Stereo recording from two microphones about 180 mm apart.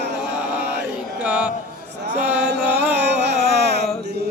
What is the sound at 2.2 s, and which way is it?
Chant, 10° right (ahead or behind).